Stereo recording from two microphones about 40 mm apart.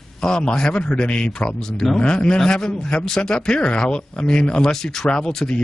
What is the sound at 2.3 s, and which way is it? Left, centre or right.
Speech, centre.